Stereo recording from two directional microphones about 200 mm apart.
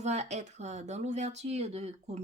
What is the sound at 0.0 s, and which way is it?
Speech, 35° right (ahead or behind).